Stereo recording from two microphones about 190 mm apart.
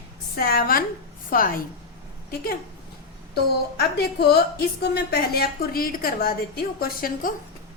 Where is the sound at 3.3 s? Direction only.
55° left (ahead or behind).